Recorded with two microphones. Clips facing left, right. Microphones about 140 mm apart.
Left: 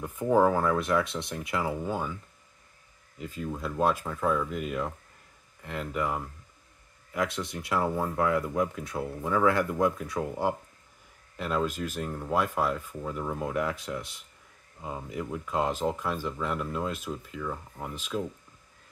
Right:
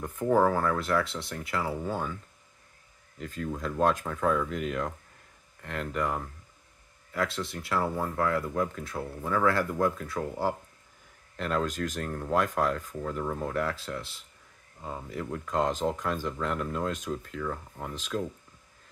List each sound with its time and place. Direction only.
0.0 s speech: 10° left (ahead or behind)
3.2 s speech: 5° left (ahead or behind)
7.1 s speech: 20° left (ahead or behind)